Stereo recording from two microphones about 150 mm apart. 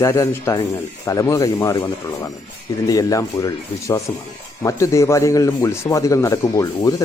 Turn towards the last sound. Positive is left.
turn(degrees=25)  # may be behind; listen again after turning